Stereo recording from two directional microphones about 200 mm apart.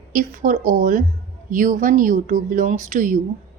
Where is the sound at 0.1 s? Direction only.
45° right (ahead or behind).